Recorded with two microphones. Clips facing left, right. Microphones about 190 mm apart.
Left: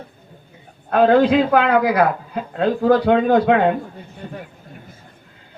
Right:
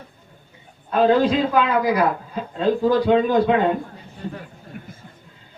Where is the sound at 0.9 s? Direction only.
60° left (ahead or behind).